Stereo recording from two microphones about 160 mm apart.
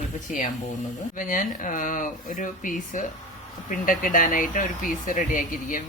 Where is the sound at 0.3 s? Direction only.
55° left (ahead or behind).